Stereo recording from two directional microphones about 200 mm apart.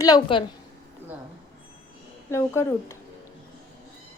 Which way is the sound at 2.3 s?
15° left (ahead or behind).